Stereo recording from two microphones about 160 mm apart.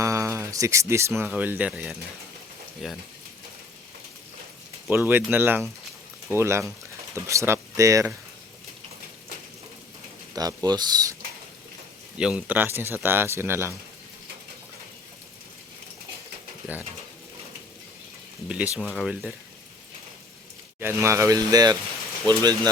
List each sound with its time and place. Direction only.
0.0 s a sound: 20° right (ahead or behind)
1.3 s speech: 10° right (ahead or behind)
4.9 s speech: 10° right (ahead or behind)
10.3 s speech: 25° right (ahead or behind)
12.1 s speech: 5° right (ahead or behind)
18.4 s speech: 5° right (ahead or behind)
20.7 s speech: 15° right (ahead or behind)